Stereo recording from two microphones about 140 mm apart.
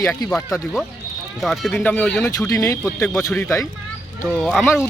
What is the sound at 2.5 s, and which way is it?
Speech, 20° left (ahead or behind).